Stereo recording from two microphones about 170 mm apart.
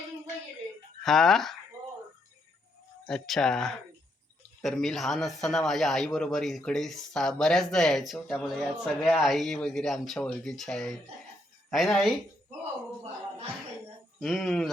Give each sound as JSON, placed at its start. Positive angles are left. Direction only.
{"t": 1.0, "sound": "speech", "side_deg": 0}
{"t": 3.1, "sound": "speech", "side_deg": 0}
{"t": 14.2, "sound": "speech", "side_deg": 0}